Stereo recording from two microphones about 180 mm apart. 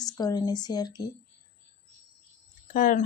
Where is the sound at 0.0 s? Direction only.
20° left (ahead or behind).